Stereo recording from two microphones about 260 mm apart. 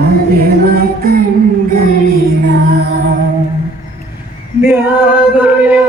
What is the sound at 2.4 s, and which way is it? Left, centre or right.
Music, right.